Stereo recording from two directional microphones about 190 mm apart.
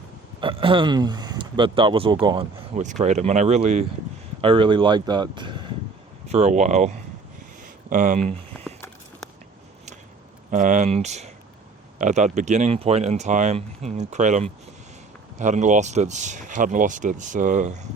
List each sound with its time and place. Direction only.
0.3 s speech: 25° right (ahead or behind)
2.7 s speech: 40° right (ahead or behind); by 5.6 s 25° right (ahead or behind)
6.2 s speech: 35° right (ahead or behind)
10.5 s speech: 40° right (ahead or behind)